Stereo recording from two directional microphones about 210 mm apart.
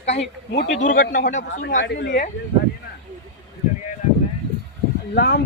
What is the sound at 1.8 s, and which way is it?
Speech, 55° left (ahead or behind).